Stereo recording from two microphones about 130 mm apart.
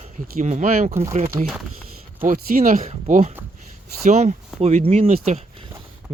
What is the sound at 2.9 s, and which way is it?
Speech, 65° right (ahead or behind).